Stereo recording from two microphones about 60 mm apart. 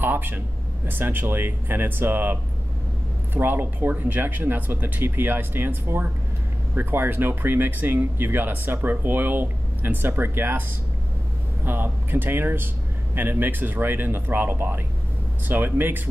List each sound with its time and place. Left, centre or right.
0.0 s a sound: right
0.8 s speech: right
3.3 s speech: right
11.6 s speech: right